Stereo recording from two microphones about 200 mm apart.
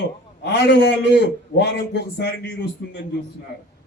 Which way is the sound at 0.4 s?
60° left (ahead or behind).